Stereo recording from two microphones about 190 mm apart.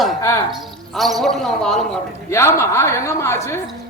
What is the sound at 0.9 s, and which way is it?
Speech, centre (ahead or behind).